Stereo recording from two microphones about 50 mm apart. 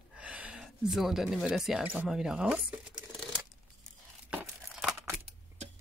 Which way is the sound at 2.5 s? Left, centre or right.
Right.